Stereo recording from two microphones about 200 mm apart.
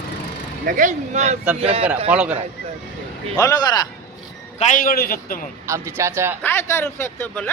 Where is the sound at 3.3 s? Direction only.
20° left (ahead or behind).